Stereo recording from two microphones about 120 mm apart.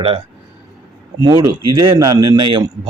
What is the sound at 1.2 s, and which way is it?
Speech, 30° right (ahead or behind).